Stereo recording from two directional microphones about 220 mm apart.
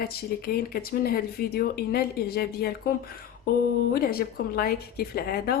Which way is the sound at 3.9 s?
45° left (ahead or behind).